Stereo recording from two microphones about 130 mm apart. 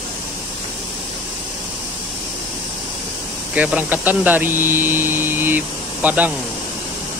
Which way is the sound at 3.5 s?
10° right (ahead or behind).